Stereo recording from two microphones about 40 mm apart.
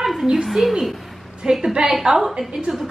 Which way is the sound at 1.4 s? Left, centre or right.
Centre.